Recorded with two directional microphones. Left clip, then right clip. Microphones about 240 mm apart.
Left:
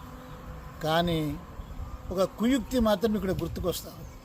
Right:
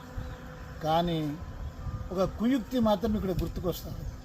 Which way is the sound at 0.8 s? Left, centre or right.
Centre.